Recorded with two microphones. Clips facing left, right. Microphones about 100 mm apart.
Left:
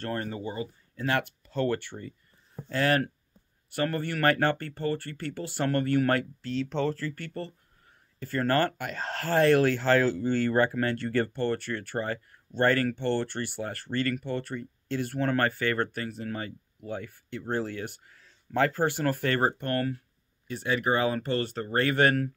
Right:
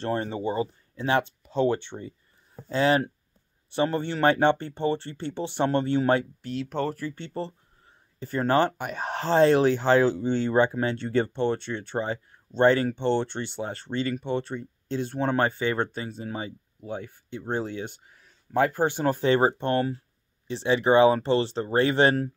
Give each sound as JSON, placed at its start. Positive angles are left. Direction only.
{"t": 0.0, "sound": "speech", "side_deg": -25}
{"t": 6.5, "sound": "speech", "side_deg": -10}